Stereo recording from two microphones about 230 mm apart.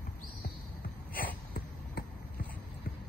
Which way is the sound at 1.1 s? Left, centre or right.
Left.